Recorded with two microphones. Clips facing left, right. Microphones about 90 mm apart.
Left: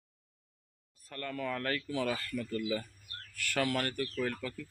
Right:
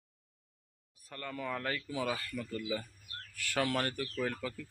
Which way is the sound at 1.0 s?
15° right (ahead or behind).